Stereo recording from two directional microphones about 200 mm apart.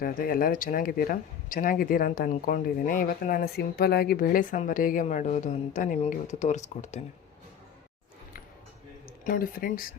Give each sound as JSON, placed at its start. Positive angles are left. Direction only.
{"t": 0.0, "sound": "speech", "side_deg": 45}
{"t": 9.2, "sound": "speech", "side_deg": 45}